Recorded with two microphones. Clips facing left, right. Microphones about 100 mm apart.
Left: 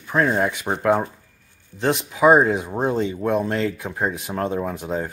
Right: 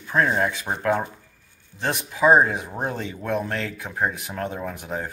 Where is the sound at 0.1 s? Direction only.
20° left (ahead or behind).